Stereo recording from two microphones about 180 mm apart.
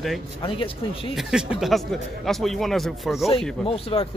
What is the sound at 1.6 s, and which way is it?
Speech, centre (ahead or behind).